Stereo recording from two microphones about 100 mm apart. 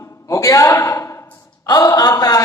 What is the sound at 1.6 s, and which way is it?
Speech, 35° left (ahead or behind).